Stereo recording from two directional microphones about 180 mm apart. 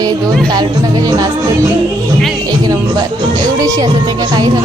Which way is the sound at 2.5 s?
20° right (ahead or behind).